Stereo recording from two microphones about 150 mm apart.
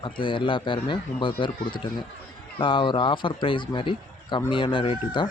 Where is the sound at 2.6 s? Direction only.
30° left (ahead or behind).